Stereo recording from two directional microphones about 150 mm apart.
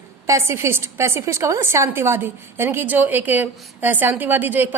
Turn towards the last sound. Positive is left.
turn(degrees=-10)  # may be behind; listen again after turning